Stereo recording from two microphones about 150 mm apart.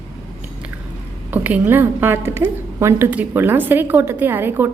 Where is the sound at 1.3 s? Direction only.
10° right (ahead or behind).